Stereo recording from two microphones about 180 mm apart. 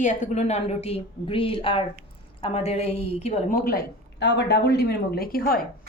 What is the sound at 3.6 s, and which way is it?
A woman's voice, 65° left (ahead or behind).